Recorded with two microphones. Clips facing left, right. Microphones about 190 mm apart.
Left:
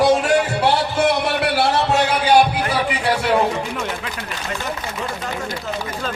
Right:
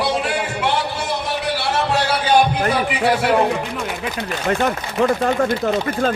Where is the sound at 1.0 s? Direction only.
65° left (ahead or behind).